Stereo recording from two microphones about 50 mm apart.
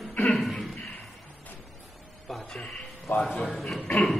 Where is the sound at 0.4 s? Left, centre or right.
Centre.